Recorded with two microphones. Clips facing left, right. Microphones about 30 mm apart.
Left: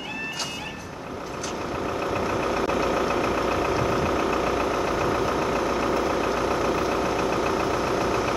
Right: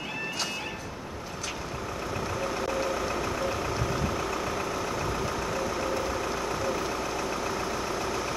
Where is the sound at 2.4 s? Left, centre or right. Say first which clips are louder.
Left 3 dB; left.